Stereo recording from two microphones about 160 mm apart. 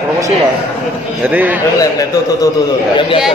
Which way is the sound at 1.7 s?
20° left (ahead or behind).